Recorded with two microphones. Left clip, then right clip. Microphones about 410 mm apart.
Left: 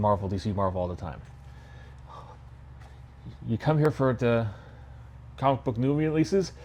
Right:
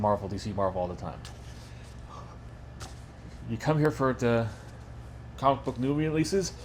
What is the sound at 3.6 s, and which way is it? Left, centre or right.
Speech, left.